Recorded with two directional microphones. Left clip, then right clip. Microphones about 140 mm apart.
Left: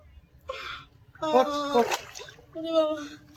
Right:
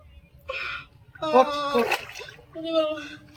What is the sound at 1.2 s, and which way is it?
Speech, 20° left (ahead or behind).